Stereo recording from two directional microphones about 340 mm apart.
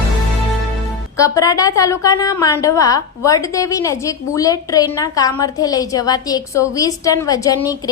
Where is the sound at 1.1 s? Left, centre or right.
Centre.